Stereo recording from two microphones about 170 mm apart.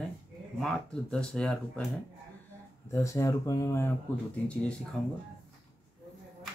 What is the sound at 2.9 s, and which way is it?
Speech, 15° left (ahead or behind).